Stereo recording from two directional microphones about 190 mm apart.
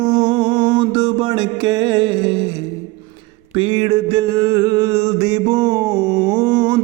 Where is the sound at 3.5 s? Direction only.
25° right (ahead or behind).